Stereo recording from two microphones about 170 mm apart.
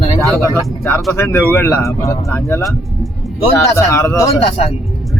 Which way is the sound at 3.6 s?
15° left (ahead or behind).